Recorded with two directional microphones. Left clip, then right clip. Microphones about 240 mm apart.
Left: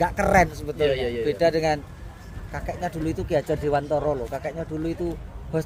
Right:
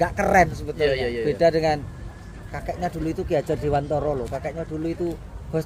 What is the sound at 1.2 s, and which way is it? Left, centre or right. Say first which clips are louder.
Speech: right 3 dB; centre.